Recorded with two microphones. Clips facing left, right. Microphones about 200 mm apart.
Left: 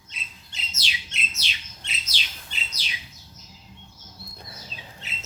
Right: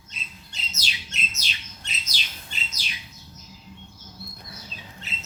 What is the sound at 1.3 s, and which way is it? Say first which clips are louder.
Bird: right 1 dB; 45° right (ahead or behind).